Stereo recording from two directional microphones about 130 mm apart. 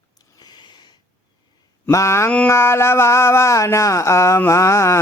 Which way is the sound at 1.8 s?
20° left (ahead or behind).